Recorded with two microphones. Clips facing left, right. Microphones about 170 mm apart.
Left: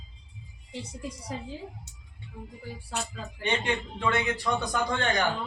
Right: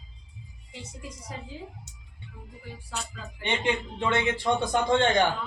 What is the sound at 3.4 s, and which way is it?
Speech, 25° right (ahead or behind).